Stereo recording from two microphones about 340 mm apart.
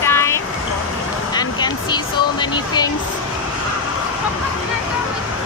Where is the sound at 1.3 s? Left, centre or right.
Centre.